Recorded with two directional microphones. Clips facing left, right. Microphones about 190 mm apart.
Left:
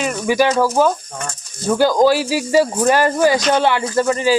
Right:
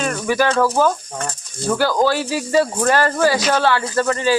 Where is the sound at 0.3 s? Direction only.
15° left (ahead or behind).